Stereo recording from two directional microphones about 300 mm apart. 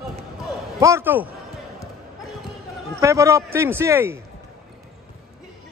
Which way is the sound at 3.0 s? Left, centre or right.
Centre.